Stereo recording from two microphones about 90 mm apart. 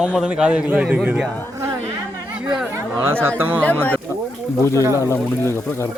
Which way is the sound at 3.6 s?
20° left (ahead or behind).